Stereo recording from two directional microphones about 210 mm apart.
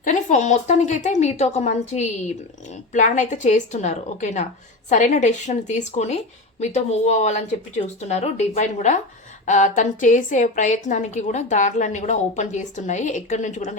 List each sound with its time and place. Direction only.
0.0 s a woman's voice: 35° left (ahead or behind)